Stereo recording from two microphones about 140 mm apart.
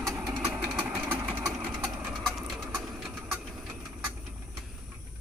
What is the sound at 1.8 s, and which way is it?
Vehicle, 20° right (ahead or behind).